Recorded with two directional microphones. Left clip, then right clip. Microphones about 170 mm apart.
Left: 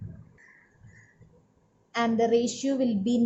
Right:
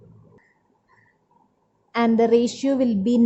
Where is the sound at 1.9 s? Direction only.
35° right (ahead or behind).